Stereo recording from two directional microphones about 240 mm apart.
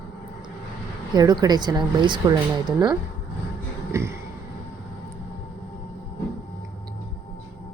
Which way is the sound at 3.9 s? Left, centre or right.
Centre.